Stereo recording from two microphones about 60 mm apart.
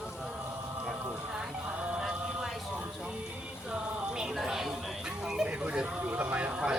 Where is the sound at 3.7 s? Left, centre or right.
Centre.